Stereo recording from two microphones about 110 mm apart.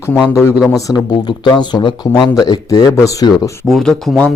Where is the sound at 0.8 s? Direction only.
35° left (ahead or behind).